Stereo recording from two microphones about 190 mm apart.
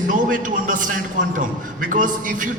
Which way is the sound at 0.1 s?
45° right (ahead or behind).